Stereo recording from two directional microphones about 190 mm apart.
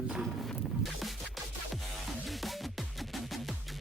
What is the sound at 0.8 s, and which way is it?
Music, centre (ahead or behind).